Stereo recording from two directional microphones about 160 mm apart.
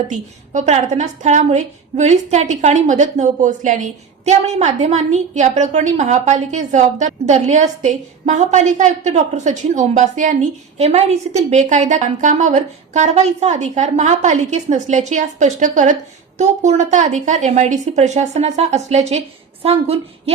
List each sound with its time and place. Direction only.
0.1 s a woman's voice: 45° right (ahead or behind)